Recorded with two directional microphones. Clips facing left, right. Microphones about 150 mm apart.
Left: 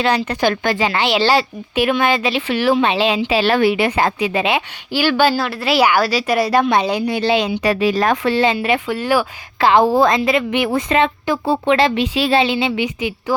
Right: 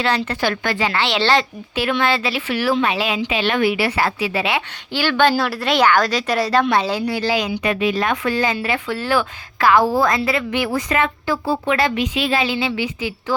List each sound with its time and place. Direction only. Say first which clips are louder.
0.3 s a woman's voice: left 4 dB; 20° left (ahead or behind)
5.4 s speech: left 1 dB; centre (ahead or behind); by 7.6 s 25° left (ahead or behind)
7.6 s a woman's voice: left 3 dB; 40° left (ahead or behind); by 13.3 s 20° left (ahead or behind)